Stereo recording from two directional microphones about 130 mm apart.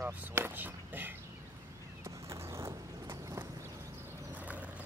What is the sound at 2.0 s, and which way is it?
Vehicle, 20° right (ahead or behind).